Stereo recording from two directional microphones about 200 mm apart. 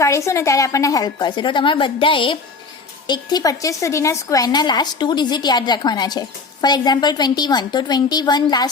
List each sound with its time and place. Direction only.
0.0 s a woman's voice: 15° left (ahead or behind)